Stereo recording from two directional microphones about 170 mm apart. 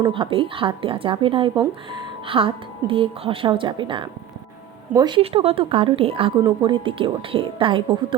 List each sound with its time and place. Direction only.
0.0 s a woman's voice: 30° right (ahead or behind)